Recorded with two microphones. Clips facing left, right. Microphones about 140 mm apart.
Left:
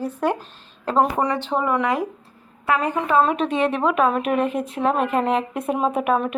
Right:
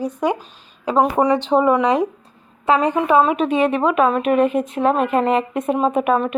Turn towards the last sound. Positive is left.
turn(degrees=0)  # may be behind; listen again after turning